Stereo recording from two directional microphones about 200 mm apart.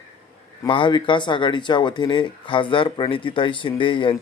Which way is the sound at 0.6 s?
25° left (ahead or behind).